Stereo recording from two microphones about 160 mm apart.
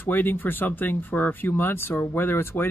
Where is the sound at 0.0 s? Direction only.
10° left (ahead or behind).